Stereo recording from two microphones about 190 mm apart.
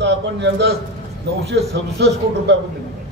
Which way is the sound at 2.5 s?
70° right (ahead or behind).